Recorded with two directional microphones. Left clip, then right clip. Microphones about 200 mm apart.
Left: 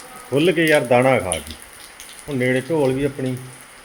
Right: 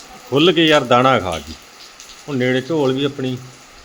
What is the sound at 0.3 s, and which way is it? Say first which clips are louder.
Speech: right 3 dB; 25° right (ahead or behind).